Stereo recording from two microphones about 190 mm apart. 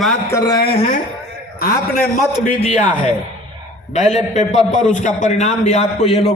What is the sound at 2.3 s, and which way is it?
A man's voice, 35° left (ahead or behind).